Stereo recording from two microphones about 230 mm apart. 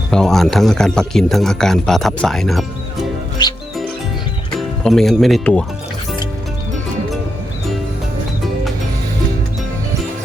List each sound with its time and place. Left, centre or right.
0.1 s speech: centre
3.4 s music: centre
4.5 s speech: centre